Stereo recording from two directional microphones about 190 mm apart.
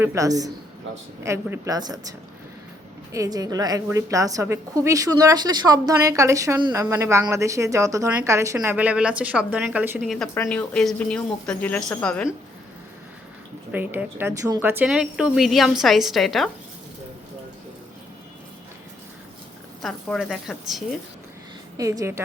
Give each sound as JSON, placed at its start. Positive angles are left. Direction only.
{"t": 0.0, "sound": "a woman's voice", "side_deg": -15}
{"t": 10.0, "sound": "a woman's voice", "side_deg": 0}
{"t": 13.7, "sound": "speech", "side_deg": -10}
{"t": 19.8, "sound": "speech", "side_deg": 0}
{"t": 21.8, "sound": "a woman's voice", "side_deg": -15}